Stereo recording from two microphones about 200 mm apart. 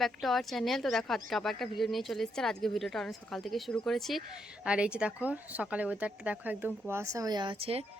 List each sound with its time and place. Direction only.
0.0 s speech: centre (ahead or behind); by 7.9 s 30° right (ahead or behind)